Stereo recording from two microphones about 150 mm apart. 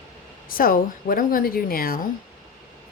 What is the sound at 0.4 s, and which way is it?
A woman's voice, 70° left (ahead or behind).